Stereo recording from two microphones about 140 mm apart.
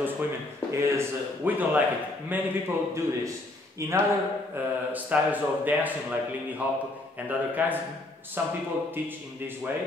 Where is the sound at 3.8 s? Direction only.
20° right (ahead or behind).